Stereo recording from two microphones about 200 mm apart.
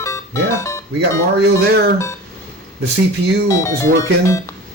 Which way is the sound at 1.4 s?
55° right (ahead or behind).